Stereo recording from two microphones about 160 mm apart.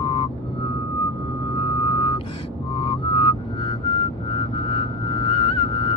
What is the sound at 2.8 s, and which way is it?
Music, 35° left (ahead or behind).